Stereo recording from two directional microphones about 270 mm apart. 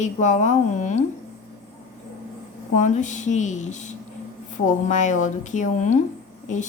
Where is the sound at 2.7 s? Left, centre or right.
Left.